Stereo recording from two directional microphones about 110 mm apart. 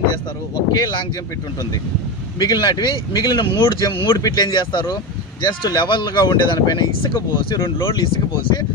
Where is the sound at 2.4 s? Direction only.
40° left (ahead or behind).